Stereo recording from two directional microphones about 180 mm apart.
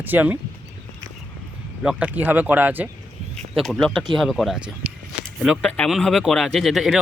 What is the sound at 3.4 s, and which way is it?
Speech, centre (ahead or behind).